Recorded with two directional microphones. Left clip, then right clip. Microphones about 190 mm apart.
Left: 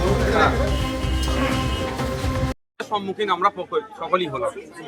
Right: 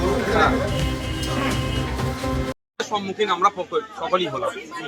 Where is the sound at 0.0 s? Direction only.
Centre (ahead or behind).